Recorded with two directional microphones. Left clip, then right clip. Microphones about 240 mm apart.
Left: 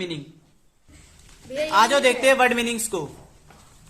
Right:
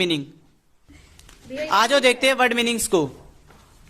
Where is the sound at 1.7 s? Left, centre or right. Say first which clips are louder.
Right 1 dB; right.